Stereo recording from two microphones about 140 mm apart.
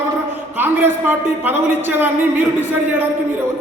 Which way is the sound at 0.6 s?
15° right (ahead or behind).